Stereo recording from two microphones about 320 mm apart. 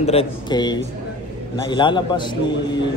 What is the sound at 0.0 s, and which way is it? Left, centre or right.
A man's voice, centre.